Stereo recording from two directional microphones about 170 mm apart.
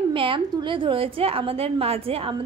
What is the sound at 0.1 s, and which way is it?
A woman's voice, 30° right (ahead or behind).